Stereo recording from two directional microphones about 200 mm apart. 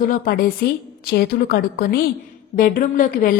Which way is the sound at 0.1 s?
45° left (ahead or behind).